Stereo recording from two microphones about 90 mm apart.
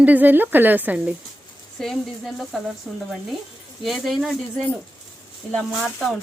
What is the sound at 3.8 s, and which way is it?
Speech, centre (ahead or behind).